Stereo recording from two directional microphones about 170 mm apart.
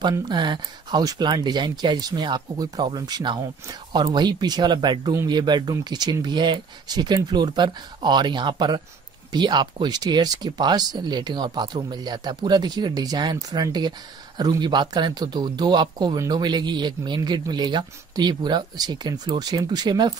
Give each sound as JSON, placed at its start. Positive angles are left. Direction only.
{"t": 0.0, "sound": "speech", "side_deg": -25}